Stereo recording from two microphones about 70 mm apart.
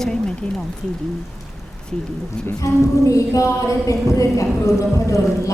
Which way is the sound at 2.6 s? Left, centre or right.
Left.